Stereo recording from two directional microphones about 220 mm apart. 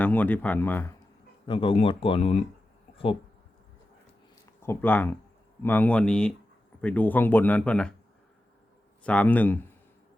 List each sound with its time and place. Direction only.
0.0 s speech: 5° left (ahead or behind)
1.5 s speech: 25° left (ahead or behind)
2.9 s a sound: 25° left (ahead or behind)
4.6 s speech: 10° left (ahead or behind)
9.0 s speech: 5° left (ahead or behind)